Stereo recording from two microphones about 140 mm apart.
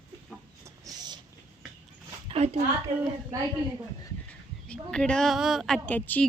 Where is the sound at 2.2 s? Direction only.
45° right (ahead or behind).